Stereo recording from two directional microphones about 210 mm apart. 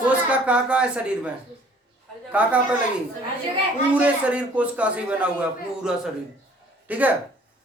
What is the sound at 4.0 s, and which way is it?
A man's voice, 5° right (ahead or behind).